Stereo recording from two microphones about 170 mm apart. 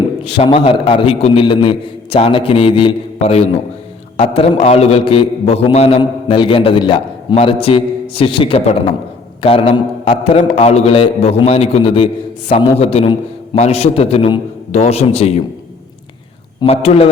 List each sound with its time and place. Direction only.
0.3 s a man's voice: 35° left (ahead or behind)
16.6 s a man's voice: 35° left (ahead or behind)